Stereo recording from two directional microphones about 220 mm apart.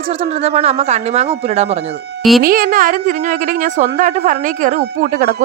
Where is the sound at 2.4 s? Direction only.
40° right (ahead or behind).